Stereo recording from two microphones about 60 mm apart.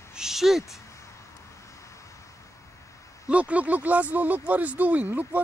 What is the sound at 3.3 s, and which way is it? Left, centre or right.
Speech, right.